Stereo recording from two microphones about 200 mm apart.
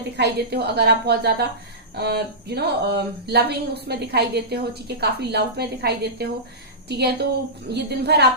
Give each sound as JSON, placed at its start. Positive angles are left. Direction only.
{"t": 0.2, "sound": "a woman's voice", "side_deg": -55}